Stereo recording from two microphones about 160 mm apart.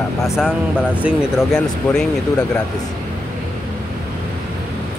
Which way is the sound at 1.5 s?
5° left (ahead or behind).